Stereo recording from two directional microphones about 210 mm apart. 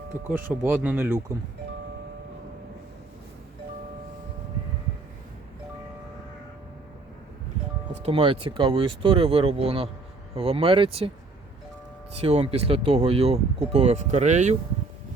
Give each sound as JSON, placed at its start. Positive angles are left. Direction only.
{"t": 0.3, "sound": "speech", "side_deg": -10}
{"t": 8.0, "sound": "speech", "side_deg": -25}
{"t": 12.2, "sound": "speech", "side_deg": -30}